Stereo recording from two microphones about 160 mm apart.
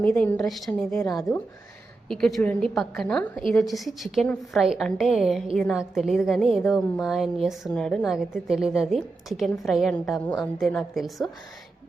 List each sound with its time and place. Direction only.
0.0 s speech: 10° left (ahead or behind)
1.0 s a woman's voice: 20° left (ahead or behind)
2.0 s speech: 5° left (ahead or behind)